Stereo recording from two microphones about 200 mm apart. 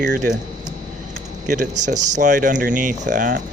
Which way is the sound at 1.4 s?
40° right (ahead or behind).